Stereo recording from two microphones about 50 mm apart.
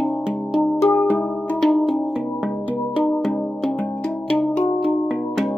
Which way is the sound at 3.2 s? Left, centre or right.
Centre.